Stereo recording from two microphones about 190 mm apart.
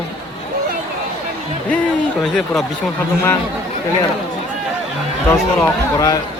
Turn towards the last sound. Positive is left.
turn(degrees=15)  # may be behind; listen again after turning